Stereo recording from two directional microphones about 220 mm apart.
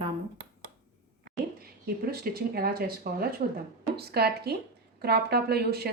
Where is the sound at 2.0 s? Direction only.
40° right (ahead or behind).